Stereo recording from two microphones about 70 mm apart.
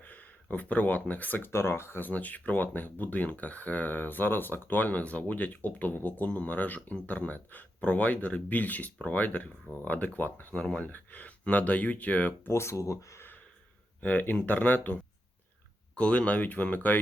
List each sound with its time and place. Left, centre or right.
0.0 s speech: left
12.5 s speech: left
14.0 s speech: left